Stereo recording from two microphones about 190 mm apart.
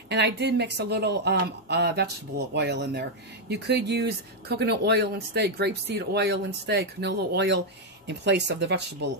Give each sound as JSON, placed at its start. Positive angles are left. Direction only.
{"t": 0.1, "sound": "speech", "side_deg": -65}